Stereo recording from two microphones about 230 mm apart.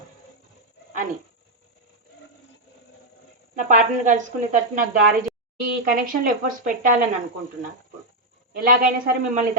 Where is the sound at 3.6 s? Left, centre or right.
Right.